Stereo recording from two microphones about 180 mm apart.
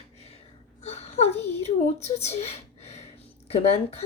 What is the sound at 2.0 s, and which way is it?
Speech, 35° left (ahead or behind).